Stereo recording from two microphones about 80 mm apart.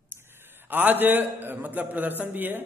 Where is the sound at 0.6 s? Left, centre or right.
Right.